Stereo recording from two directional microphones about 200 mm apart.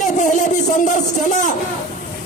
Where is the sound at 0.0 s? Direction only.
40° left (ahead or behind).